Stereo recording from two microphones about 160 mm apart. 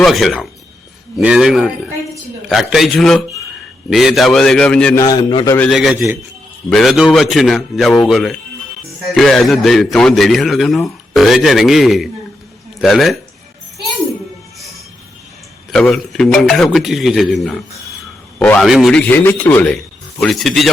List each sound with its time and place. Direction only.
0.0 s speech: centre (ahead or behind)
4.9 s a man's voice: 25° left (ahead or behind)
5.5 s speech: centre (ahead or behind)
15.7 s a man's voice: centre (ahead or behind)